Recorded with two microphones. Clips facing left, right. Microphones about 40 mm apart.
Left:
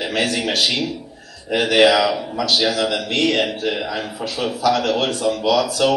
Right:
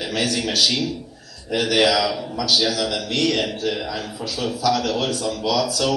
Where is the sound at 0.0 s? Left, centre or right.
Left.